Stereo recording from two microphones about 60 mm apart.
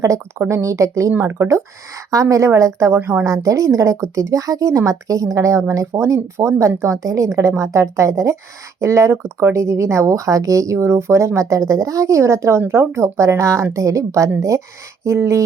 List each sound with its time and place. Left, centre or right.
0.3 s speech: right
0.6 s speech: right
2.9 s speech: right
3.2 s speech: right